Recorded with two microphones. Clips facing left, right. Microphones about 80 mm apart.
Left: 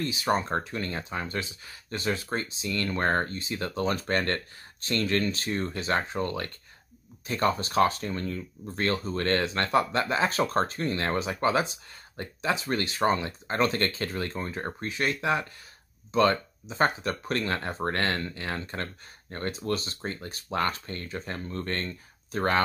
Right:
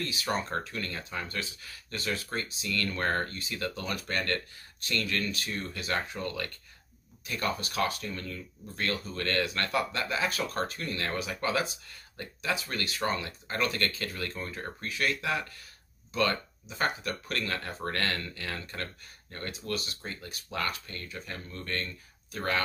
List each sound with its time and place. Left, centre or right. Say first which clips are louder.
0.0 s speech: left 5 dB; left